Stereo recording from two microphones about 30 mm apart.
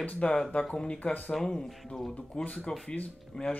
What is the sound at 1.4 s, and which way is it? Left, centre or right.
Speech, centre.